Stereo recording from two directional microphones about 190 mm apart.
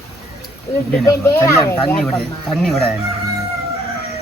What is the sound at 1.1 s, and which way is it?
Speech, 15° left (ahead or behind).